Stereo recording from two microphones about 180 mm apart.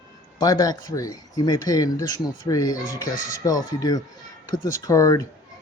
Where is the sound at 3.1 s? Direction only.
45° left (ahead or behind).